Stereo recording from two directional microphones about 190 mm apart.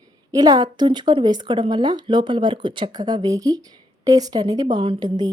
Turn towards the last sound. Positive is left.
turn(degrees=-20)  # may be behind; listen again after turning